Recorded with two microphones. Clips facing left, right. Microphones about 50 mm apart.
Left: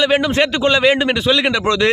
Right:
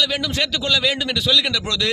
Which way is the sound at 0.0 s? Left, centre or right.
Left.